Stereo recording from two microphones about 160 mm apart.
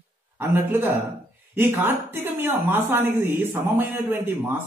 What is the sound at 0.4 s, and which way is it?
Speech, 15° right (ahead or behind).